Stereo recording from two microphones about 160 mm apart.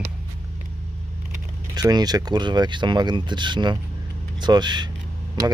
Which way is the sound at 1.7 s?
25° right (ahead or behind).